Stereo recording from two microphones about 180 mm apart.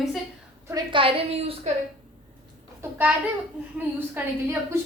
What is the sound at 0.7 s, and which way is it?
A woman's voice, 30° right (ahead or behind).